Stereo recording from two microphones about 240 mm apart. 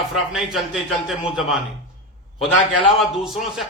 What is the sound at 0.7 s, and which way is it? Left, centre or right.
Speech, centre.